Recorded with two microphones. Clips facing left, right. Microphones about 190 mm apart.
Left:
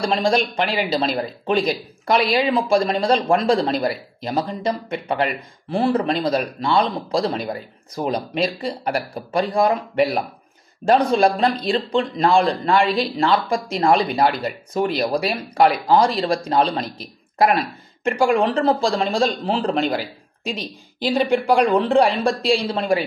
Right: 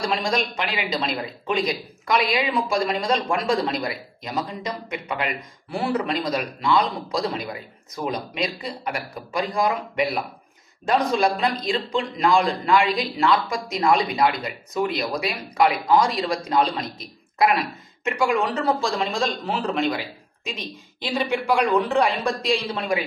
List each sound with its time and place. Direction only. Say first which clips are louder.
0.0 s a man's voice: left 5 dB; 30° left (ahead or behind)
5.7 s a man's voice: left 5 dB; 25° left (ahead or behind)
9.7 s speech: left 5 dB; 45° left (ahead or behind)
10.9 s a man's voice: left 5 dB; 30° left (ahead or behind)
18.1 s a man's voice: left 4 dB; 30° left (ahead or behind)